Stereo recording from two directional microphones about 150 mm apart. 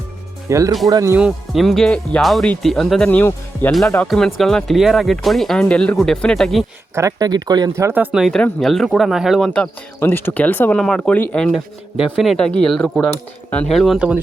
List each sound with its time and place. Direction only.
0.4 s speech: 20° right (ahead or behind)
1.1 s speech: 5° right (ahead or behind); by 3.7 s 10° left (ahead or behind)
3.7 s speech: centre (ahead or behind)
6.9 s speech: 20° right (ahead or behind); by 14.2 s 5° right (ahead or behind)